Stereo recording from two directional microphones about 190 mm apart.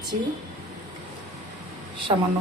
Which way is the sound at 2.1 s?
25° right (ahead or behind).